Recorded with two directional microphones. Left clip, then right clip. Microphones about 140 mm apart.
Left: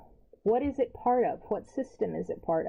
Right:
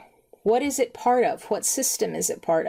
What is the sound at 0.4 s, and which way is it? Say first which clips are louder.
Speech: right 5 dB; 30° right (ahead or behind).